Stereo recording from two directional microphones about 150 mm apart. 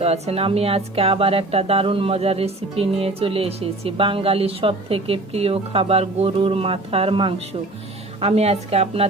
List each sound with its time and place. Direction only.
0.0 s a woman's voice: 45° right (ahead or behind)